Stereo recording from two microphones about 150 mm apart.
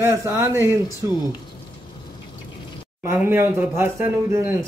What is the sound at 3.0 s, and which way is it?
Speech, 15° right (ahead or behind).